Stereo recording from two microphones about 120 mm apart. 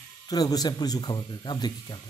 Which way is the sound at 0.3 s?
30° left (ahead or behind).